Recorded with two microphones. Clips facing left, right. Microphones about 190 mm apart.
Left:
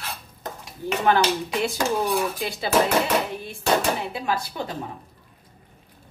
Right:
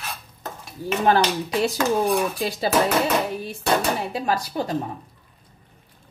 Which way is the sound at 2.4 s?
40° right (ahead or behind).